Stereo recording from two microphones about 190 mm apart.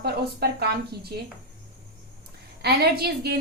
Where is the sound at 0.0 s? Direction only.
55° right (ahead or behind).